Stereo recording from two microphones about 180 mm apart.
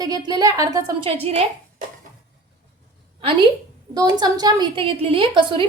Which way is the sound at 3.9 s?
20° right (ahead or behind).